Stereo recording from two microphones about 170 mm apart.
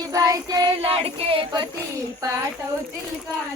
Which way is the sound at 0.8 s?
35° right (ahead or behind).